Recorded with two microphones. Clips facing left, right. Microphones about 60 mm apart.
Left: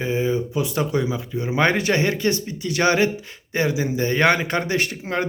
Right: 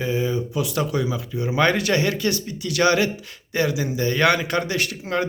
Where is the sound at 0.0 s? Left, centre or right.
Left.